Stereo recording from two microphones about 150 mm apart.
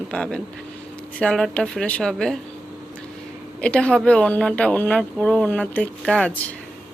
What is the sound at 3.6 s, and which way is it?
Speech, 5° left (ahead or behind).